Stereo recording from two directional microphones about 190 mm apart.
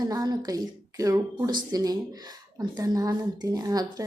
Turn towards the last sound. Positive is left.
turn(degrees=-20)  # may be behind; listen again after turning